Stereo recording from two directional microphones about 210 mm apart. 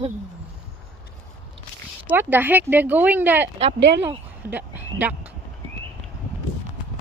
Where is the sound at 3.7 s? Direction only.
55° right (ahead or behind).